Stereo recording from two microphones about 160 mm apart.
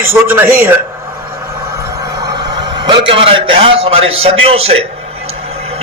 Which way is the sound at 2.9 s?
30° right (ahead or behind).